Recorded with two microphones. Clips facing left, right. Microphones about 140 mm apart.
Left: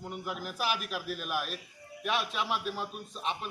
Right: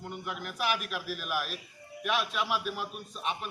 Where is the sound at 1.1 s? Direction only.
30° left (ahead or behind).